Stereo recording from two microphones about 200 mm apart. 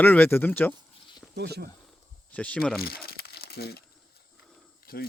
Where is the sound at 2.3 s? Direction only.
5° left (ahead or behind).